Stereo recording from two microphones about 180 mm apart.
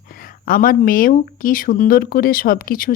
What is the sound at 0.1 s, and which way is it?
Speech, 50° left (ahead or behind).